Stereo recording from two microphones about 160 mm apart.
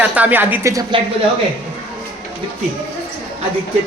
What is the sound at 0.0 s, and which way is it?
Speech, 10° right (ahead or behind).